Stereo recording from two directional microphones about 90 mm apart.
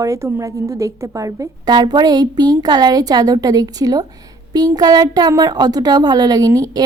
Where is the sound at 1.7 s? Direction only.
55° right (ahead or behind).